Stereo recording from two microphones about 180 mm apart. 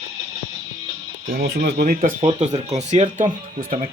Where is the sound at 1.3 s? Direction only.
60° right (ahead or behind).